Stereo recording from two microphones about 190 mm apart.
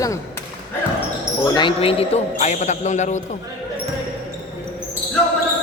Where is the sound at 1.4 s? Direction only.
20° left (ahead or behind); by 3.2 s 40° left (ahead or behind).